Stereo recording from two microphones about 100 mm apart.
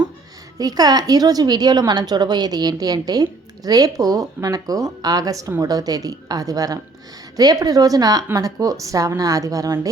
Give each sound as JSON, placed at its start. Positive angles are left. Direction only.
{"t": 0.6, "sound": "a woman's voice", "side_deg": -40}